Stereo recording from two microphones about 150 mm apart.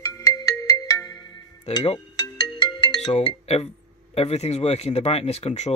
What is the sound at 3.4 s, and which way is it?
Speech, 40° left (ahead or behind).